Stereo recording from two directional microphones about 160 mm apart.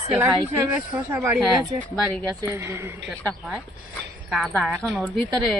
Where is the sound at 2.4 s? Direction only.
15° right (ahead or behind).